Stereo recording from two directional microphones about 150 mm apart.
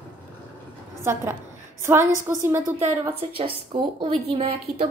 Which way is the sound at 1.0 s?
15° right (ahead or behind).